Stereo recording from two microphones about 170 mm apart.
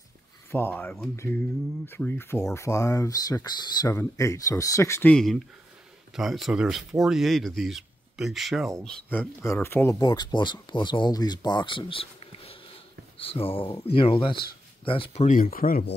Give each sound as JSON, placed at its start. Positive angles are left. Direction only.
{"t": 0.5, "sound": "speech", "side_deg": 10}
{"t": 5.1, "sound": "speech", "side_deg": 0}
{"t": 15.2, "sound": "speech", "side_deg": 50}